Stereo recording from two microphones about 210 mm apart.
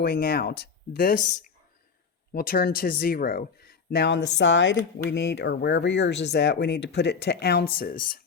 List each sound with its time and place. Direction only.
0.0 s speech: 50° left (ahead or behind)
2.3 s speech: 45° left (ahead or behind)